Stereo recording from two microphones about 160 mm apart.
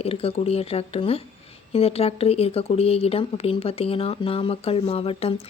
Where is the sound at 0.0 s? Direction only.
40° left (ahead or behind).